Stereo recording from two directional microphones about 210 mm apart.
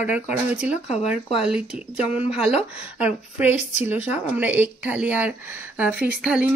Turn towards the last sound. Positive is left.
turn(degrees=-5)  # may be behind; listen again after turning